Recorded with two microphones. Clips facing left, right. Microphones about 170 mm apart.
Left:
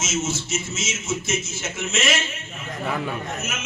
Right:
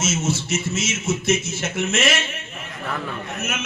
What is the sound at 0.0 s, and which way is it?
A man's voice, 60° right (ahead or behind).